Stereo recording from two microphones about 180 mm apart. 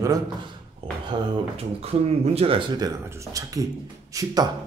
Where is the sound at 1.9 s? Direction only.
30° right (ahead or behind).